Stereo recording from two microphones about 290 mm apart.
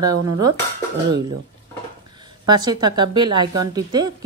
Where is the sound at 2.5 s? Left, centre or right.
Centre.